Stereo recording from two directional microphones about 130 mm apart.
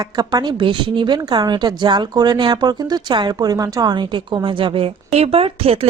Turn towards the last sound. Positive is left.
turn(degrees=-50)  # may be behind; listen again after turning